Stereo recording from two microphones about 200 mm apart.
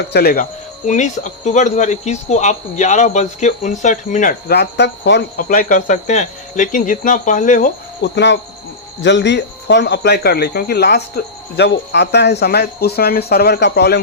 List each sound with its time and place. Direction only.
0.1 s speech: 50° left (ahead or behind)
0.9 s speech: 35° left (ahead or behind); by 5.5 s 60° left (ahead or behind)
5.5 s speech: 40° left (ahead or behind)
8.0 s speech: 60° left (ahead or behind)